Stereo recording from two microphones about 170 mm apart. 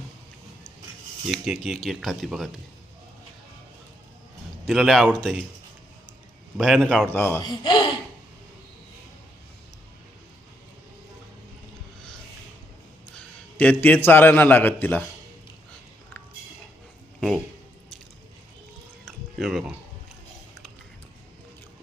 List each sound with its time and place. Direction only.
1.3 s speech: centre (ahead or behind)
4.6 s speech: centre (ahead or behind)
6.6 s speech: 5° left (ahead or behind)
7.4 s speech: 25° left (ahead or behind)
13.1 s a man's voice: 10° left (ahead or behind)
17.2 s speech: centre (ahead or behind)
19.0 s a sound: centre (ahead or behind)